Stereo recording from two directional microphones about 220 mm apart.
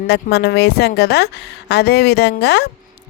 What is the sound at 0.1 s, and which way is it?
Speech, 50° left (ahead or behind).